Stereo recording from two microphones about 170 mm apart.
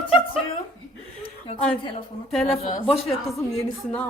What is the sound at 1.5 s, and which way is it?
Speech, 30° left (ahead or behind).